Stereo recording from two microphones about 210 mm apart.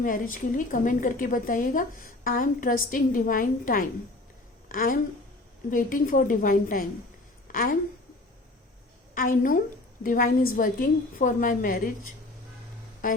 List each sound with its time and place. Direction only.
0.0 s a woman's voice: 40° left (ahead or behind)
9.1 s a woman's voice: 40° left (ahead or behind)